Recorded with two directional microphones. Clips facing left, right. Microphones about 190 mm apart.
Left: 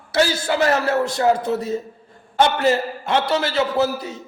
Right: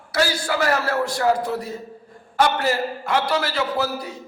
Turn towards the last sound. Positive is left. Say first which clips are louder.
# left 4 dB
turn(degrees=25)  # may be behind; listen again after turning